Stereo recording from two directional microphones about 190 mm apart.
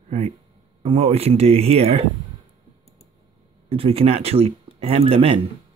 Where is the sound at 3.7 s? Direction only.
30° right (ahead or behind).